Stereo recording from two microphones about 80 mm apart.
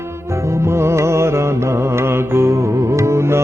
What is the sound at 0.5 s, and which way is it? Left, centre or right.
Music, right.